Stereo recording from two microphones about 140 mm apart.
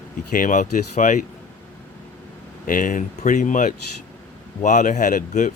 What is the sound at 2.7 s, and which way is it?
Speech, 70° left (ahead or behind).